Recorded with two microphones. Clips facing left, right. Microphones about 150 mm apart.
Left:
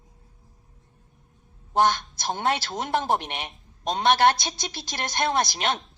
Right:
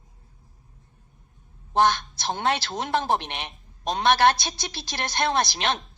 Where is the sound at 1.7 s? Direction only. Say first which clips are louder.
Right 1 dB; 15° left (ahead or behind).